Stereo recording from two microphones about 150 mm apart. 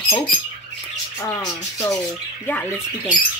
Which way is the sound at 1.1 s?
20° left (ahead or behind).